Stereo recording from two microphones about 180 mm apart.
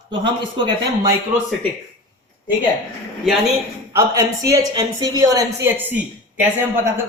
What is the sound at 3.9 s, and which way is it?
Speech, 20° right (ahead or behind).